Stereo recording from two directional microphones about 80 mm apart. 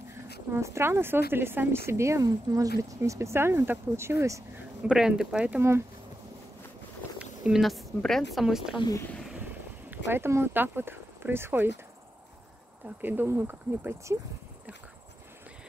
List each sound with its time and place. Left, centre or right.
0.1 s speech: right
4.8 s speech: centre
7.2 s a sound: centre
7.6 s a woman's voice: centre
9.4 s speech: right
12.8 s speech: right